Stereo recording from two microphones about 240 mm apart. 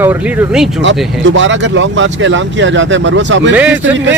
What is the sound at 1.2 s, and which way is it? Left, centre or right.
Speech, right.